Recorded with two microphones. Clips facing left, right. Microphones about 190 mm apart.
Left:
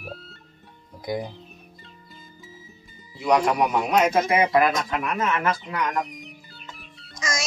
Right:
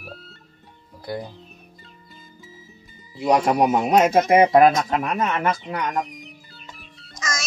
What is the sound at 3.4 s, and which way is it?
Speech, 35° right (ahead or behind).